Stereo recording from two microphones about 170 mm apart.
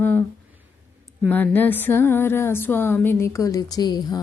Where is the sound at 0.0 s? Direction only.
10° left (ahead or behind).